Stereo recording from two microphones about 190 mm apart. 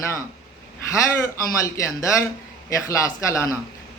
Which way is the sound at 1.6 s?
15° left (ahead or behind).